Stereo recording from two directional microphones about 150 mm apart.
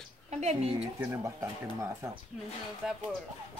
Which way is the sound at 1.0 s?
20° right (ahead or behind).